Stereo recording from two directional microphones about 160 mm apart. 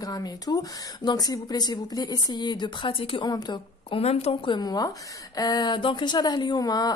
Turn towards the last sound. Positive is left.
turn(degrees=25)  # may be behind; listen again after turning